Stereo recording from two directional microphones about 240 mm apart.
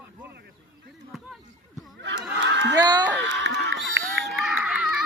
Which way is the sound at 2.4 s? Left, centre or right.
Right.